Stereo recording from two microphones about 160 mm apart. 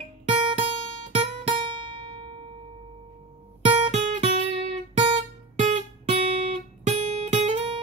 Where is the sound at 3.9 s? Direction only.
40° right (ahead or behind).